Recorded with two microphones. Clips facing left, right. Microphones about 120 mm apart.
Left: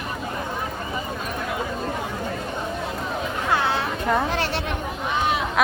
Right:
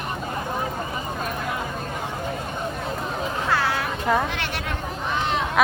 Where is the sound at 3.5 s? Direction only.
25° left (ahead or behind).